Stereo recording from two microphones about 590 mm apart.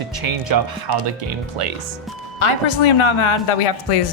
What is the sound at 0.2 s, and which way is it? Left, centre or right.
Speech, right.